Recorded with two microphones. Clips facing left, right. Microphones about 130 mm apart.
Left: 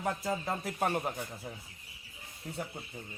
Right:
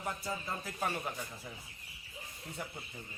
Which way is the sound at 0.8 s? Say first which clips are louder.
Left 5 dB; 55° left (ahead or behind).